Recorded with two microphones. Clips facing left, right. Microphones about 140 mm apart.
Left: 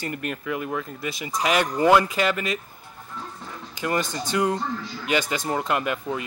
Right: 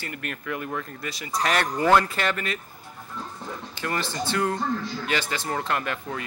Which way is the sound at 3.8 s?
15° left (ahead or behind).